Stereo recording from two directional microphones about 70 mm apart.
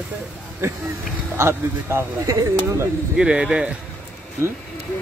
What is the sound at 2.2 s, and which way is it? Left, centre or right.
Speech, right.